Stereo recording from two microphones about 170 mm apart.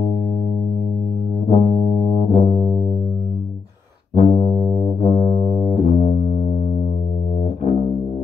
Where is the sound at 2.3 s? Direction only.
40° left (ahead or behind).